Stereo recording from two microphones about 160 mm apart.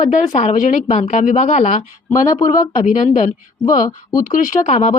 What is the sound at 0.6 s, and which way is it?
Speech, 50° left (ahead or behind).